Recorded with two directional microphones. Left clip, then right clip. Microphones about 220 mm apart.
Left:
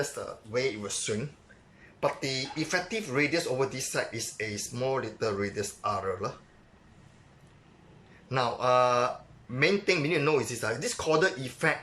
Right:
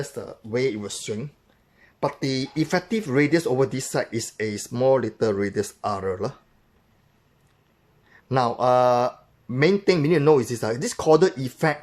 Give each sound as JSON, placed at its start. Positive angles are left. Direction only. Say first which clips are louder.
{"t": 0.2, "sound": "speech", "louder": "right 5 dB", "side_deg": -30}
{"t": 2.0, "sound": "speech", "louder": "right 4 dB", "side_deg": -30}
{"t": 8.3, "sound": "speech", "louder": "right 6 dB", "side_deg": -30}